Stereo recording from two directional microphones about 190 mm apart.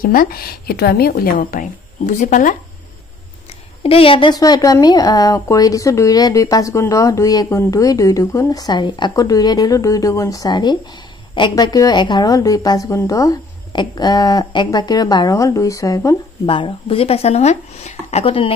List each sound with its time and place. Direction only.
0.0 s a woman's voice: 50° left (ahead or behind)
3.8 s speech: 30° left (ahead or behind)
16.4 s speech: 25° left (ahead or behind)